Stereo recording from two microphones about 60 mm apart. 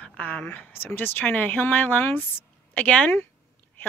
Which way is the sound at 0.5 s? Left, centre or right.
Left.